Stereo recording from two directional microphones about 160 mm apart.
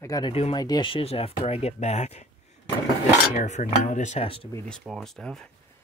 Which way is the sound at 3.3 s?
45° left (ahead or behind).